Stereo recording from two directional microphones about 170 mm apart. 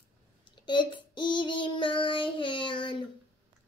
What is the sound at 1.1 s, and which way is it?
Child singing, 30° left (ahead or behind).